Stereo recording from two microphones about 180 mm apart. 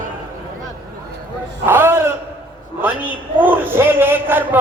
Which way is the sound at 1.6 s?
15° right (ahead or behind).